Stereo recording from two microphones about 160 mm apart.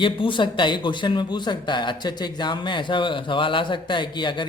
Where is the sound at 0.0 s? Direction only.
30° left (ahead or behind).